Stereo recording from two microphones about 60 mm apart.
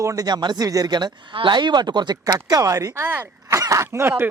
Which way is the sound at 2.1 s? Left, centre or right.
Right.